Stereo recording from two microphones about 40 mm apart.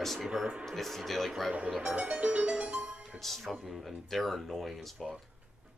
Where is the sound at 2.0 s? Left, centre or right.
Right.